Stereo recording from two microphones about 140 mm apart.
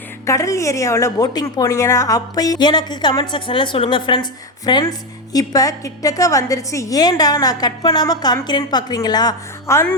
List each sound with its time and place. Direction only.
0.3 s a woman's voice: 20° left (ahead or behind)